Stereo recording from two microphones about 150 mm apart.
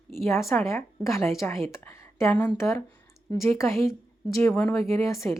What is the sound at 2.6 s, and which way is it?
Speech, 20° left (ahead or behind).